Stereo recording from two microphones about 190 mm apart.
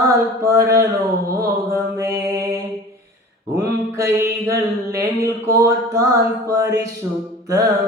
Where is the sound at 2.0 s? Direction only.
15° right (ahead or behind).